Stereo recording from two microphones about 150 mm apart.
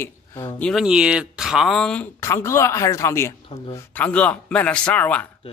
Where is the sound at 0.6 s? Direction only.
5° left (ahead or behind).